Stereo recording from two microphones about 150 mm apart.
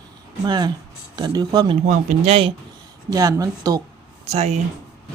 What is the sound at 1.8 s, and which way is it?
Speech, 55° right (ahead or behind).